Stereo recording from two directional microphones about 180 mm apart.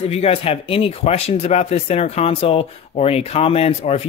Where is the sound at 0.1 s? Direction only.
35° left (ahead or behind).